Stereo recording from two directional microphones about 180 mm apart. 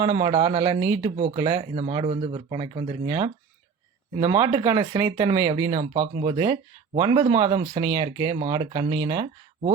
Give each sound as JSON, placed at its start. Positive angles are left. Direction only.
{"t": 0.0, "sound": "speech", "side_deg": -25}
{"t": 1.1, "sound": "speech", "side_deg": -40}
{"t": 1.4, "sound": "speech", "side_deg": -25}